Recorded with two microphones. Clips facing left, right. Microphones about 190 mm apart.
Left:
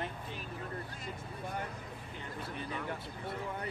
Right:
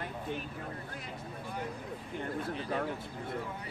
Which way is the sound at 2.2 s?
50° right (ahead or behind).